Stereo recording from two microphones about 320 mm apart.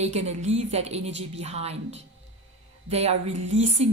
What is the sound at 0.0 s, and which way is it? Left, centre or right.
A woman's voice, right.